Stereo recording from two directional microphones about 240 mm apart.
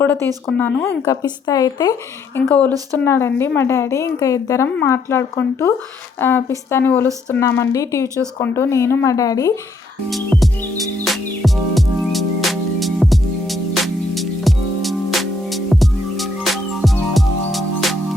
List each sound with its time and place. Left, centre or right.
0.0 s a woman's voice: centre
10.1 s music: centre